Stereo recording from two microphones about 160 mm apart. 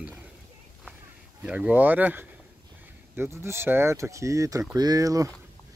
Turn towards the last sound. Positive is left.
turn(degrees=-20)  # may be behind; listen again after turning